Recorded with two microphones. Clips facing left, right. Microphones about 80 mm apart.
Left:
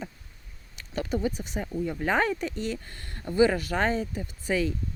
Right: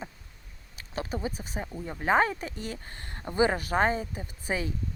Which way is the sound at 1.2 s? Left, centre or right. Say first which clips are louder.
Left 4 dB; right.